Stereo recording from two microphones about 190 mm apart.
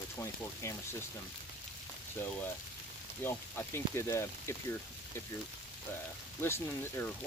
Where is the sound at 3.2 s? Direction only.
10° left (ahead or behind).